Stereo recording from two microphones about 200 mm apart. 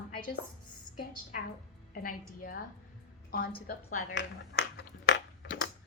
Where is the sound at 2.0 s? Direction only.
45° left (ahead or behind).